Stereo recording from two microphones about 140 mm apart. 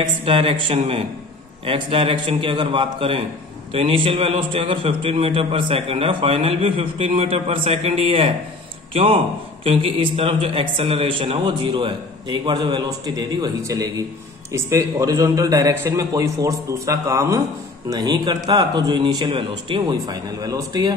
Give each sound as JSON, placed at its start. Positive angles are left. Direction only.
{"t": 0.2, "sound": "a man's voice", "side_deg": -40}